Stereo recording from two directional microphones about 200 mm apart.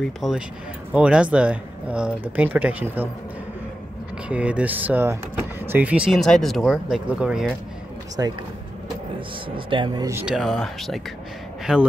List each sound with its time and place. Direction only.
0.0 s speech: centre (ahead or behind)
4.3 s speech: 5° right (ahead or behind)
8.2 s speech: 15° right (ahead or behind)
9.7 s speech: 20° right (ahead or behind)
10.2 s speech: centre (ahead or behind)